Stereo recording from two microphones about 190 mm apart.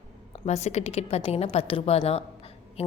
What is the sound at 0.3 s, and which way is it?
A woman's voice, 35° left (ahead or behind).